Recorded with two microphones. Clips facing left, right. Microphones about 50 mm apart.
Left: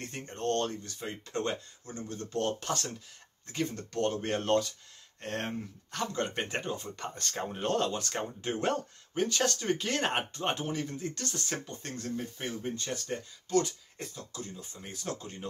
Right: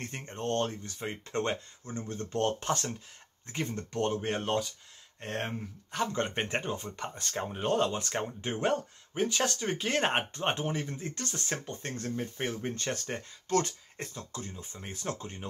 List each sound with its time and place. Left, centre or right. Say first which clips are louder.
0.0 s speech: left 1 dB; right
4.2 s speech: left 2 dB; centre
7.2 s speech: even; centre; by 15.3 s right